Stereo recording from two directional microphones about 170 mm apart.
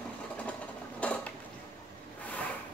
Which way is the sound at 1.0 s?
10° left (ahead or behind).